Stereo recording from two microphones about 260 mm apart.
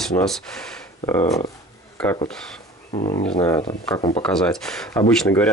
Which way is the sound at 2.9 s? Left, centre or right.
Left.